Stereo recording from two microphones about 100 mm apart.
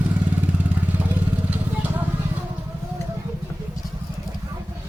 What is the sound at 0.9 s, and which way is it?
Vehicle, 15° right (ahead or behind).